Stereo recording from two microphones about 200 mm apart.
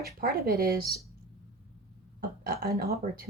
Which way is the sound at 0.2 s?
50° right (ahead or behind).